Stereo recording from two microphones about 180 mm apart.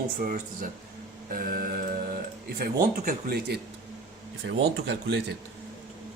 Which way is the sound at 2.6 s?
55° right (ahead or behind).